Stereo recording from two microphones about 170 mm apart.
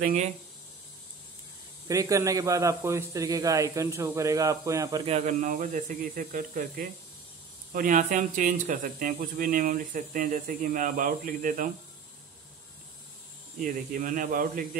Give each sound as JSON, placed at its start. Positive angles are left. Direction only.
{"t": 0.0, "sound": "speech", "side_deg": -45}
{"t": 1.9, "sound": "a man's voice", "side_deg": -20}
{"t": 5.0, "sound": "speech", "side_deg": -45}
{"t": 13.6, "sound": "speech", "side_deg": -50}